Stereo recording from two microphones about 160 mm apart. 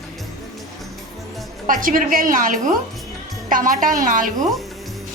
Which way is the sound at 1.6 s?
60° right (ahead or behind).